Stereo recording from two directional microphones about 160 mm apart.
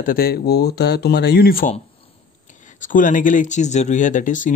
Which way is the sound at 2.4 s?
50° left (ahead or behind).